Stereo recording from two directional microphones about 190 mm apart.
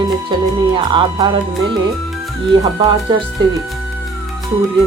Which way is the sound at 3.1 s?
25° right (ahead or behind).